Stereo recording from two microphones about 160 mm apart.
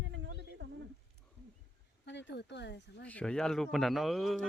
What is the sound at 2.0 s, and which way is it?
Speech, 90° left.